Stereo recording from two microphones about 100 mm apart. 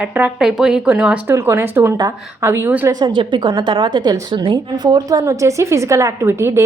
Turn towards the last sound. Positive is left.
turn(degrees=-25)  # may be behind; listen again after turning